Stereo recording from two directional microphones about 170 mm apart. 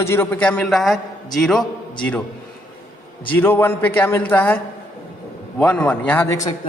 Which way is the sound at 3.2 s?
15° left (ahead or behind).